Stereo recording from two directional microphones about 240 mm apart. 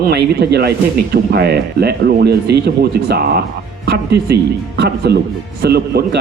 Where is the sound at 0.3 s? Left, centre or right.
Right.